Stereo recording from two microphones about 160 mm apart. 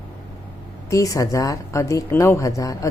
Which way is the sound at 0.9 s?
20° left (ahead or behind).